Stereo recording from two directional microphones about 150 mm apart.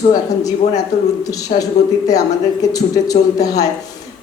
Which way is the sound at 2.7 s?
25° left (ahead or behind).